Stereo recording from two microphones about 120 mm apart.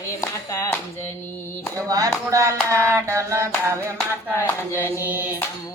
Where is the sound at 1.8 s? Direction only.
30° right (ahead or behind).